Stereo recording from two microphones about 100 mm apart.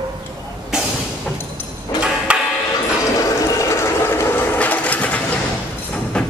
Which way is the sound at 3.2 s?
30° left (ahead or behind).